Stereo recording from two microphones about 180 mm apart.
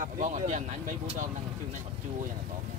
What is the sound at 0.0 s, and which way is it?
Speech, 45° right (ahead or behind).